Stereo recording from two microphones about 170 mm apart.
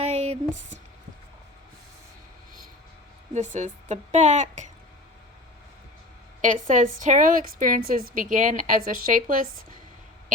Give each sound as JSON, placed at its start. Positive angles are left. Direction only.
{"t": 0.0, "sound": "a sound", "side_deg": -40}
{"t": 3.3, "sound": "a woman's voice", "side_deg": -45}
{"t": 6.4, "sound": "a woman's voice", "side_deg": -50}